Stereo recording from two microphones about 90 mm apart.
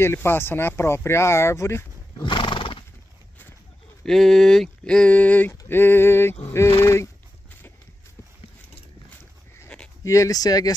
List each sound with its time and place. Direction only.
0.0 s speech: 25° left (ahead or behind)
2.2 s horse: 65° left (ahead or behind)
4.0 s speech: 5° left (ahead or behind); by 7.1 s 30° left (ahead or behind)
9.7 s a sound: 5° left (ahead or behind)
10.0 s speech: 35° left (ahead or behind)